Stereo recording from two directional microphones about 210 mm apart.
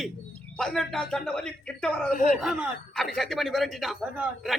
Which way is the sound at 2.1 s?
40° left (ahead or behind).